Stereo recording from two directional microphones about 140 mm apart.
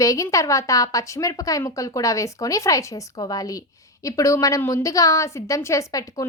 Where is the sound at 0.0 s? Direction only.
25° left (ahead or behind).